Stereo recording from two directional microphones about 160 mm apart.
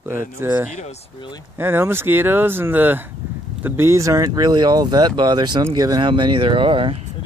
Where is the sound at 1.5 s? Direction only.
15° right (ahead or behind); by 6.9 s 35° right (ahead or behind).